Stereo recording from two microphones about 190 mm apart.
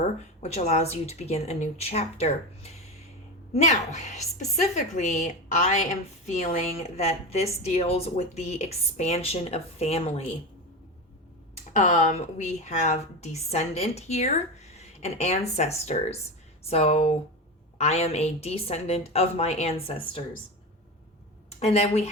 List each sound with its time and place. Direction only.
0.4 s a woman's voice: 35° left (ahead or behind)
3.5 s a woman's voice: 40° left (ahead or behind)
11.8 s a woman's voice: 35° left (ahead or behind)
21.6 s a woman's voice: 35° left (ahead or behind)